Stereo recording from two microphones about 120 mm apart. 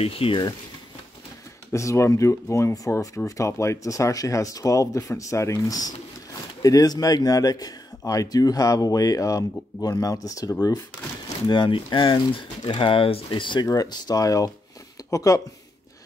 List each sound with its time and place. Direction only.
0.0 s speech: 50° left (ahead or behind)
1.7 s speech: 25° left (ahead or behind)